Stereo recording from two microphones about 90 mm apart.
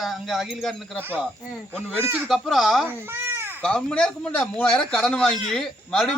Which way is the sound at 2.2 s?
Centre (ahead or behind).